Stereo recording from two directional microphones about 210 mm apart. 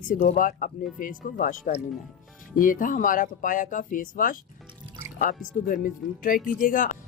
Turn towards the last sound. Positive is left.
turn(degrees=40)  # may be behind; listen again after turning